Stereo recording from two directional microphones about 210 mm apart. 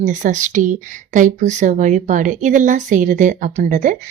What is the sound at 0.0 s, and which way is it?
Speech, 35° right (ahead or behind).